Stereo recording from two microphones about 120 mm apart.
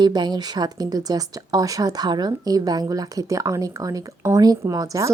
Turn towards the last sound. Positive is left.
turn(degrees=-30)  # may be behind; listen again after turning